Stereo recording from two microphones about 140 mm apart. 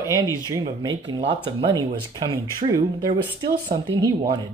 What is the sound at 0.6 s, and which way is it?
Speech, 35° right (ahead or behind).